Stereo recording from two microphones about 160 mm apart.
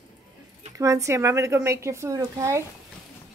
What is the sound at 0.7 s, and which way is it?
A woman's voice, 20° right (ahead or behind).